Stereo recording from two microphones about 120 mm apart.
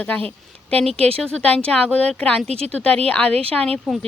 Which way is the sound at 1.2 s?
10° left (ahead or behind).